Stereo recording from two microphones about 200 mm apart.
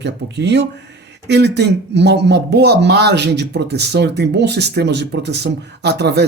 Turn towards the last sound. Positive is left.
turn(degrees=-55)  # may be behind; listen again after turning